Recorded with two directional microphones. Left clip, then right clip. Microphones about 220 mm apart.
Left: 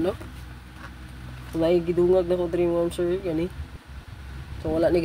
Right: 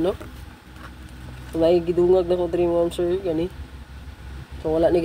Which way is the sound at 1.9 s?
35° left (ahead or behind).